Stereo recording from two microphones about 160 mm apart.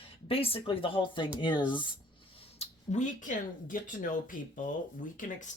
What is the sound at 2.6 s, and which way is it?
Speech, 50° left (ahead or behind).